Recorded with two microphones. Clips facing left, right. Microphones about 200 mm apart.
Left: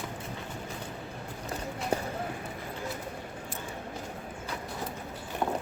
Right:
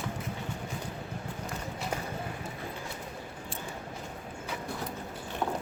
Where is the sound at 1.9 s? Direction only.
30° left (ahead or behind).